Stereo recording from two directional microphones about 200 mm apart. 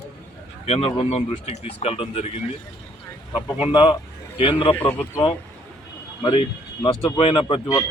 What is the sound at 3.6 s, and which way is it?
Speech, 20° left (ahead or behind).